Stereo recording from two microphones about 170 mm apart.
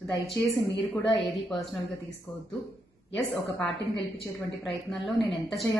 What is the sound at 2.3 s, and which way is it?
Speech, 20° left (ahead or behind).